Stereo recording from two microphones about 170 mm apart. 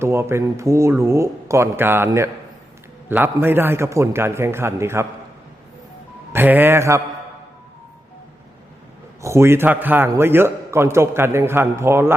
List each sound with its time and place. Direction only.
0.0 s speech: 15° right (ahead or behind)
6.3 s speech: 10° right (ahead or behind)
9.2 s speech: 15° right (ahead or behind)